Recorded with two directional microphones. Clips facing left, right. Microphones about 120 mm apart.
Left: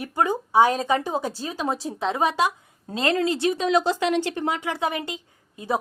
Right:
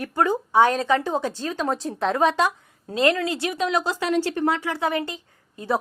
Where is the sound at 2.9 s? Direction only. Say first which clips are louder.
Right 1 dB; 25° left (ahead or behind).